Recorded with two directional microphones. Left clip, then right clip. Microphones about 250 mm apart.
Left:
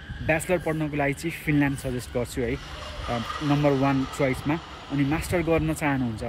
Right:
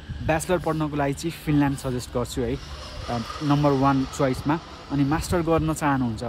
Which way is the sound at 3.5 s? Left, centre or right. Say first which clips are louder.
Right 2 dB; centre.